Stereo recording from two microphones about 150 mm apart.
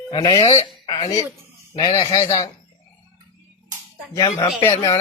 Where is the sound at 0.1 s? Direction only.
30° left (ahead or behind).